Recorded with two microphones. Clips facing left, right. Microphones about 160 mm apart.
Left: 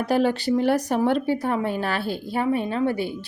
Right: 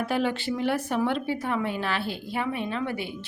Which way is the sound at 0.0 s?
40° left (ahead or behind).